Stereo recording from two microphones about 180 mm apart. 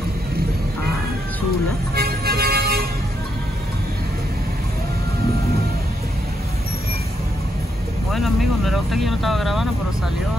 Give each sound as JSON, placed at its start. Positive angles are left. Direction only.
{"t": 2.0, "sound": "vehicle", "side_deg": -60}
{"t": 8.1, "sound": "vehicle", "side_deg": 0}